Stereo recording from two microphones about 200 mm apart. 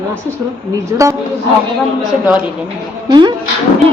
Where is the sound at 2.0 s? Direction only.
5° right (ahead or behind).